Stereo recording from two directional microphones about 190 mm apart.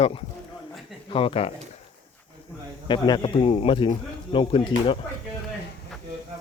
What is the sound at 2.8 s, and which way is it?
Speech, 25° left (ahead or behind).